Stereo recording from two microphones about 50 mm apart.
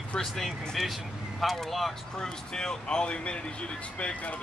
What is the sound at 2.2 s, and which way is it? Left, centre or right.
Speech, centre.